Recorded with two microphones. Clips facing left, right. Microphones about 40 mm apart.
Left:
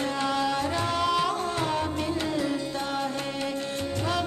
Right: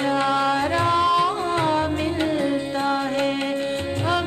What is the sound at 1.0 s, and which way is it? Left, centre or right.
Music, centre.